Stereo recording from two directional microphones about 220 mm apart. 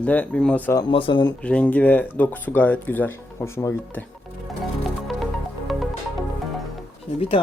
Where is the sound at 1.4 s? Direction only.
5° left (ahead or behind).